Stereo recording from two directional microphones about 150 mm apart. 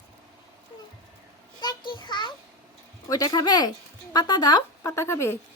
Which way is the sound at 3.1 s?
25° left (ahead or behind).